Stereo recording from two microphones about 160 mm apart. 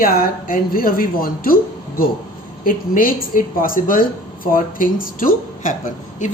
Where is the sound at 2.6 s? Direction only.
60° left (ahead or behind).